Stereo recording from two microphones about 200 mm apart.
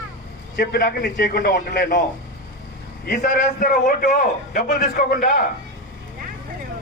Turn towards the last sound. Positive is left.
turn(degrees=45)  # may be behind; listen again after turning